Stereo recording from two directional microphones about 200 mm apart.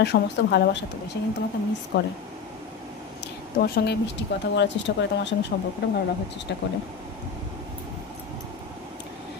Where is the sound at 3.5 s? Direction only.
50° left (ahead or behind).